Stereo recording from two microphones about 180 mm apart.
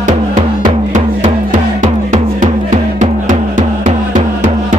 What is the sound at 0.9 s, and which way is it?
Music, 45° right (ahead or behind).